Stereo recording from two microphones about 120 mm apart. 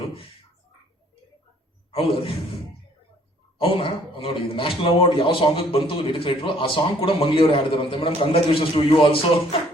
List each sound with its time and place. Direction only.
1.9 s a man's voice: 50° left (ahead or behind)
3.6 s a man's voice: 50° left (ahead or behind)